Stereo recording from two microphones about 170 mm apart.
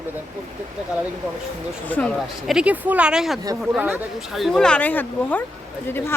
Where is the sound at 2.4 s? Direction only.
5° right (ahead or behind); by 5.4 s 10° left (ahead or behind).